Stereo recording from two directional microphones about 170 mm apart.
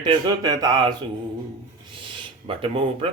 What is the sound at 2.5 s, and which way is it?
Speech, 30° right (ahead or behind).